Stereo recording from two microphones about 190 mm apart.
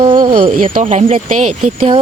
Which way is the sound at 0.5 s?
45° right (ahead or behind).